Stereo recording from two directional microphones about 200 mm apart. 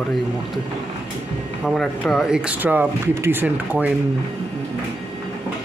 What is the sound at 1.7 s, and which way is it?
Speech, centre (ahead or behind).